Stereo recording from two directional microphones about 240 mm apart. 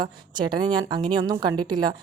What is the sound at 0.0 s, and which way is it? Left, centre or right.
A woman's voice, centre.